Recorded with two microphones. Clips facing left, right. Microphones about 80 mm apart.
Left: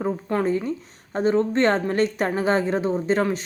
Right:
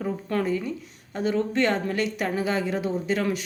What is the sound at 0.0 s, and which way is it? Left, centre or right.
A woman's voice, left.